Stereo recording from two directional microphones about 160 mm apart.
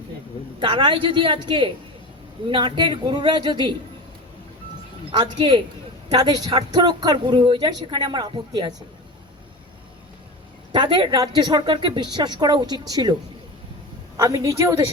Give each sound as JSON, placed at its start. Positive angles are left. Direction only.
{"t": 0.6, "sound": "a woman's voice", "side_deg": -30}
{"t": 5.1, "sound": "a woman's voice", "side_deg": -30}
{"t": 10.7, "sound": "a woman's voice", "side_deg": -30}
{"t": 14.2, "sound": "speech", "side_deg": -20}